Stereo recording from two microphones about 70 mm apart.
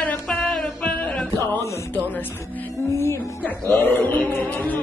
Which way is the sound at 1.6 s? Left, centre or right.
Left.